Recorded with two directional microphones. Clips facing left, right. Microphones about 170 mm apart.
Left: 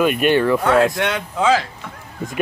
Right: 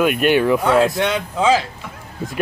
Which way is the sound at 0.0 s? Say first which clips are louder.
Even; 5° right (ahead or behind).